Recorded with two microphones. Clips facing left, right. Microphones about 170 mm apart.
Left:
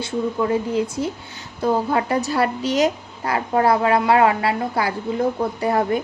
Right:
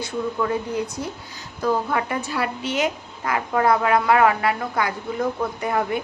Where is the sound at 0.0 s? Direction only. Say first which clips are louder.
Left 3 dB; 25° left (ahead or behind).